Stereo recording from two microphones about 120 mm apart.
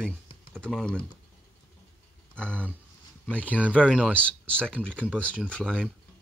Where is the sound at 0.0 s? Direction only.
5° left (ahead or behind).